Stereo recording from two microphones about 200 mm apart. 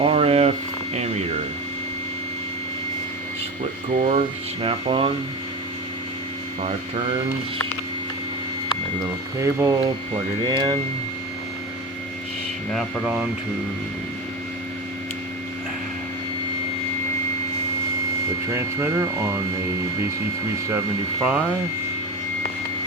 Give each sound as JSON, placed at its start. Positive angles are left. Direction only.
{"t": 0.0, "sound": "hum", "side_deg": -30}
{"t": 3.9, "sound": "speech", "side_deg": -30}
{"t": 9.4, "sound": "speech", "side_deg": -15}
{"t": 12.7, "sound": "speech", "side_deg": -10}
{"t": 18.5, "sound": "speech", "side_deg": -15}
{"t": 20.7, "sound": "speech", "side_deg": -15}